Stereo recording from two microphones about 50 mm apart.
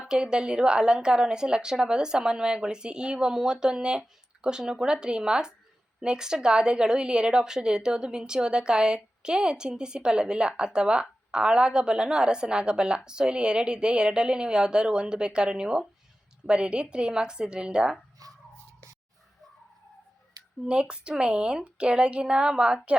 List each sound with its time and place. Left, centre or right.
0.1 s a woman's voice: centre
20.7 s a woman's voice: centre